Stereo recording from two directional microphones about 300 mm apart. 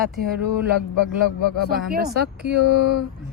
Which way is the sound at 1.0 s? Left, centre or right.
Left.